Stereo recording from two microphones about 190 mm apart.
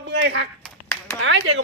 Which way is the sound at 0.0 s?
70° right (ahead or behind).